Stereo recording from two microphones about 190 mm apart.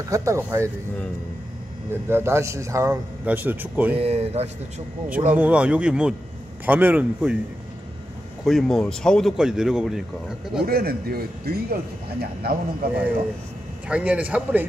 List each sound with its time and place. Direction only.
0.1 s a man's voice: 15° right (ahead or behind)
1.9 s a man's voice: 10° right (ahead or behind)
4.0 s speech: 30° right (ahead or behind)
5.3 s a man's voice: 5° right (ahead or behind)
8.5 s speech: centre (ahead or behind)
10.6 s a man's voice: 55° right (ahead or behind)
13.8 s a man's voice: 5° right (ahead or behind)